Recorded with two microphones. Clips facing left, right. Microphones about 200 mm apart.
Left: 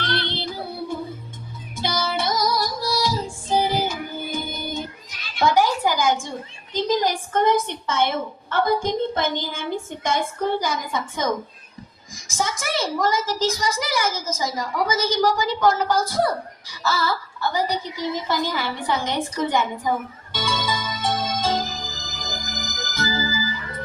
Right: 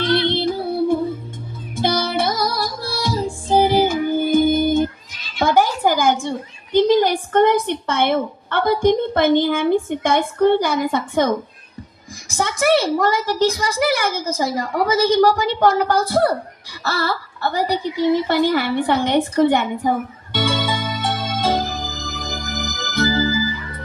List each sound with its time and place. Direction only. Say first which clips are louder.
0.0 s child singing: right 9 dB; 55° right (ahead or behind)
1.7 s music: right 6 dB; 55° right (ahead or behind)
5.4 s a sound: right 3 dB; 55° right (ahead or behind)
6.7 s a woman's voice: right 7 dB; 65° right (ahead or behind)
12.3 s a woman's voice: right 9 dB; 65° right (ahead or behind)
20.3 s music: right 5 dB; 60° right (ahead or behind)